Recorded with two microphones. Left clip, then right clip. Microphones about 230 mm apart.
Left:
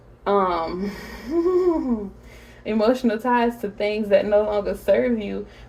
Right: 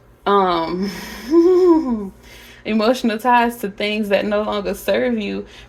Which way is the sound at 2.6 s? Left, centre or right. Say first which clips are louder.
Right 2 dB; right.